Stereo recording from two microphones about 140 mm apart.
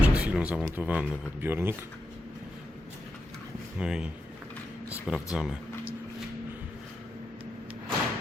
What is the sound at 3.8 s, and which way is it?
Speech, 5° right (ahead or behind).